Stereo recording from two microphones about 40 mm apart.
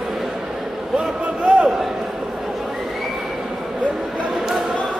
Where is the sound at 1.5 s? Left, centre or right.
Right.